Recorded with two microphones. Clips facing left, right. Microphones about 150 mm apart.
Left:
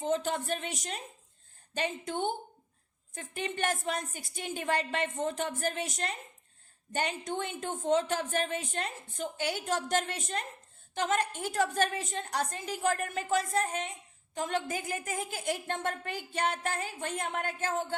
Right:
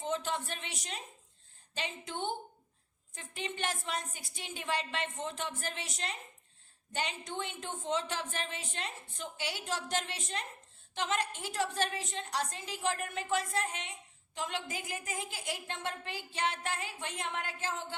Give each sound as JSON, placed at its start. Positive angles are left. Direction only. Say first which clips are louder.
{"t": 0.0, "sound": "a woman's voice", "louder": "left 5 dB", "side_deg": 45}
{"t": 6.9, "sound": "a woman's voice", "louder": "left 5 dB", "side_deg": 50}